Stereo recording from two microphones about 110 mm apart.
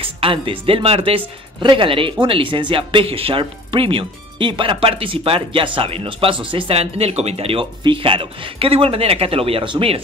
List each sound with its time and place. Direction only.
0.0 s speech: 55° right (ahead or behind)